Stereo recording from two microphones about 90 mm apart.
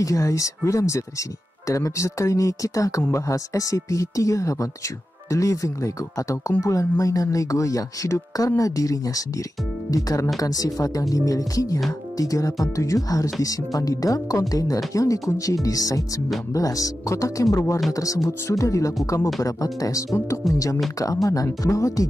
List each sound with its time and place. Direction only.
0.0 s speech: 35° left (ahead or behind)